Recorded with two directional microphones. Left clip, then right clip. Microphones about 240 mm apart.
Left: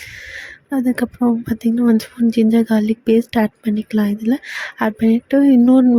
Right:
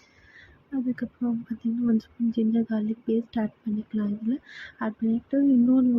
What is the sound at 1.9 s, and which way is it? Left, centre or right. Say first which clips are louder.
Speech: left 11 dB; left.